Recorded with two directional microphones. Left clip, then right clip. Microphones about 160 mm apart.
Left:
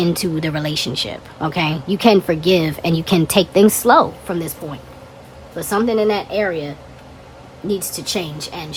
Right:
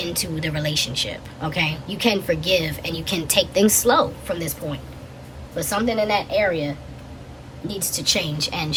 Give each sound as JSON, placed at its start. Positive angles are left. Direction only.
{"t": 0.0, "sound": "a woman's voice", "side_deg": 20}
{"t": 5.5, "sound": "a woman's voice", "side_deg": 25}
{"t": 7.8, "sound": "a woman's voice", "side_deg": 20}